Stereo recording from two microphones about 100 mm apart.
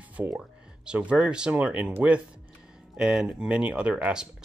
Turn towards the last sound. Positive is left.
turn(degrees=-5)  # may be behind; listen again after turning